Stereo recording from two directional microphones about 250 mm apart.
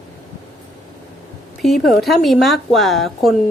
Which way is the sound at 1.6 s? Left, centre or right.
Centre.